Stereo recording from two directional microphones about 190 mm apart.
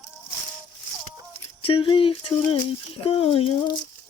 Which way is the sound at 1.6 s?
25° left (ahead or behind).